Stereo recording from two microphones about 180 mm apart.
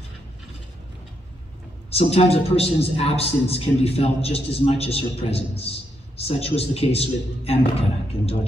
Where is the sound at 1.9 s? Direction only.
35° left (ahead or behind).